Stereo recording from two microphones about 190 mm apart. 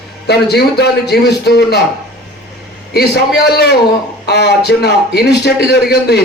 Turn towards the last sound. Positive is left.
turn(degrees=60)  # may be behind; listen again after turning